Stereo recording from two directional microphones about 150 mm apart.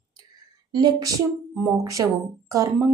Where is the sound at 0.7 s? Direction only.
25° right (ahead or behind).